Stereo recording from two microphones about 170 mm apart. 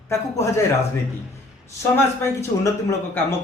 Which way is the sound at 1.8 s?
15° left (ahead or behind).